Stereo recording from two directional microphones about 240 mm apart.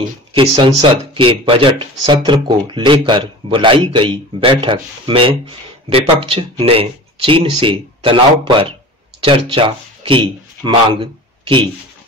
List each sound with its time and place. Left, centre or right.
0.3 s speech: right